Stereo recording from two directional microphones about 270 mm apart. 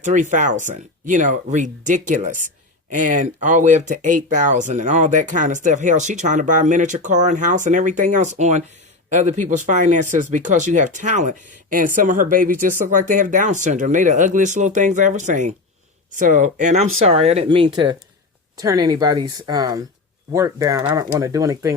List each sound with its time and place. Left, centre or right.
0.0 s speech: right